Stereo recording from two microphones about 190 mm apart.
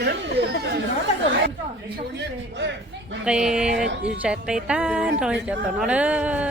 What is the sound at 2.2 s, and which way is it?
Speech, 70° right (ahead or behind).